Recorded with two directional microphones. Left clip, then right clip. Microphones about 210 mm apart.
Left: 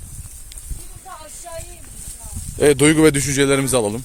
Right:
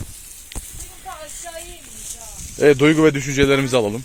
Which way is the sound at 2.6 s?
25° left (ahead or behind).